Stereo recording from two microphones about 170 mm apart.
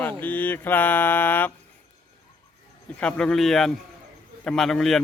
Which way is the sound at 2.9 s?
5° left (ahead or behind).